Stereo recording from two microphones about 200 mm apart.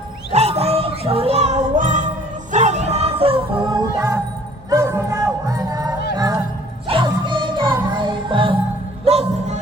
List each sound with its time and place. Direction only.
0.3 s music: 30° right (ahead or behind)